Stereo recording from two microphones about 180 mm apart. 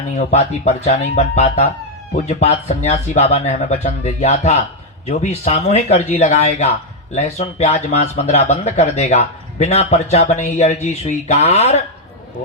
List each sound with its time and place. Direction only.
0.1 s speech: 35° left (ahead or behind)